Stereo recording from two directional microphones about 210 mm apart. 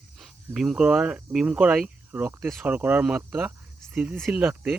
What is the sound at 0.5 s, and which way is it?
Speech, centre (ahead or behind).